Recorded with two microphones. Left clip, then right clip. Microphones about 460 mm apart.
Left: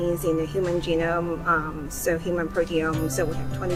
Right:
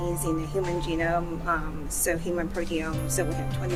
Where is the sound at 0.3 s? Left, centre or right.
Right.